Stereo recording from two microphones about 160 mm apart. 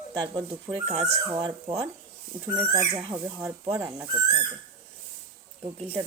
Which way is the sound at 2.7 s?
20° right (ahead or behind).